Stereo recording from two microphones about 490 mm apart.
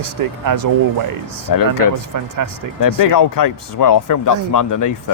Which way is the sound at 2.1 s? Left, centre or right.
Right.